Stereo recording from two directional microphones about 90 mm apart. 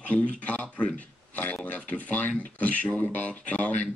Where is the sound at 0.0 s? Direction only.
15° left (ahead or behind).